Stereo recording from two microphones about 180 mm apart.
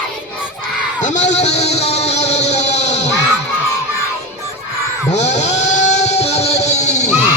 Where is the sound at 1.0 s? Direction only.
40° left (ahead or behind).